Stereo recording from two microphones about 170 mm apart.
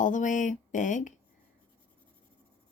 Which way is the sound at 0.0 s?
50° left (ahead or behind).